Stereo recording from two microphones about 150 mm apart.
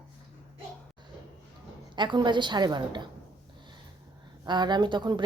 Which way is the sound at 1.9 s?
30° right (ahead or behind).